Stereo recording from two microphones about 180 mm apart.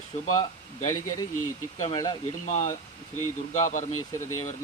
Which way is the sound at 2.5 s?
40° left (ahead or behind).